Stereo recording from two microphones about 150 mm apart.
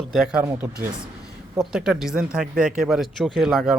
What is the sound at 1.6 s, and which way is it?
Speech, 5° right (ahead or behind).